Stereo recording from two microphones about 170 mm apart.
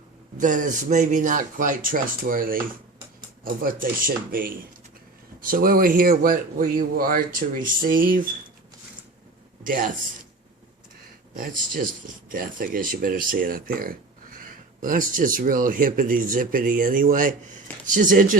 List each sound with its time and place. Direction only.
0.3 s speech: 50° right (ahead or behind)
9.6 s speech: 55° right (ahead or behind)
11.7 s speech: 55° right (ahead or behind)